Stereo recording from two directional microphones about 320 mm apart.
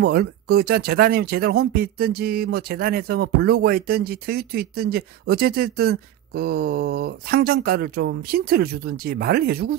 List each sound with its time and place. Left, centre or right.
0.0 s speech: right